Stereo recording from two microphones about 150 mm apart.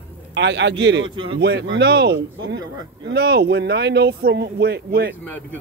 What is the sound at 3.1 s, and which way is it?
Speech, 90° right.